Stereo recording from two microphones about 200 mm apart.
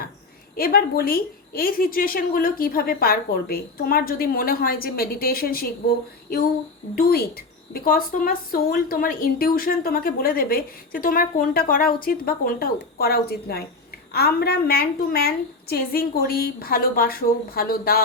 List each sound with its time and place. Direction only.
0.5 s a woman's voice: 50° left (ahead or behind)
6.9 s a woman's voice: 50° left (ahead or behind)